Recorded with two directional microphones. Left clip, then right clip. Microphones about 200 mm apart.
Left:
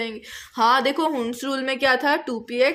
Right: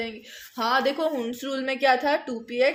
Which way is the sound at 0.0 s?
50° left (ahead or behind).